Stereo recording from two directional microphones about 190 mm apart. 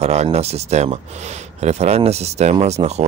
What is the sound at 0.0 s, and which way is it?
Speech, 35° right (ahead or behind).